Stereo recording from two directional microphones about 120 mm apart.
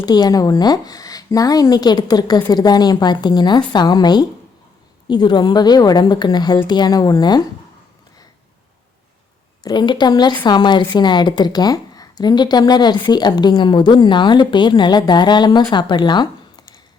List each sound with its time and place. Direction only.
0.0 s a woman's voice: 35° left (ahead or behind)
9.6 s a woman's voice: 40° left (ahead or behind)